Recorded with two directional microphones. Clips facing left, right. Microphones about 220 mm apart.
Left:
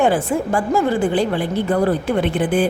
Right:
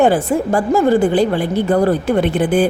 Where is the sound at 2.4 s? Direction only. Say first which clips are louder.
Right 3 dB; 40° right (ahead or behind).